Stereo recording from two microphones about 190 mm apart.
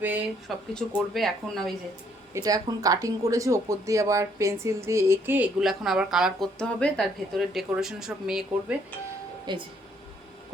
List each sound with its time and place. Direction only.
0.0 s speech: 10° right (ahead or behind)
2.3 s speech: 20° right (ahead or behind); by 8.4 s 5° right (ahead or behind)
9.5 s speech: 25° right (ahead or behind)